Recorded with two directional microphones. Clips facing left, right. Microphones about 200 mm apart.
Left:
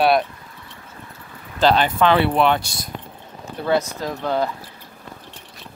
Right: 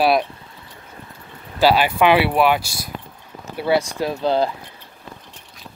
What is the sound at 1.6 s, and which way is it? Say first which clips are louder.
Speech: right 1 dB; 10° right (ahead or behind).